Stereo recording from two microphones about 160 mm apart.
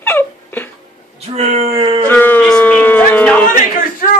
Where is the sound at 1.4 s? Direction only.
40° right (ahead or behind).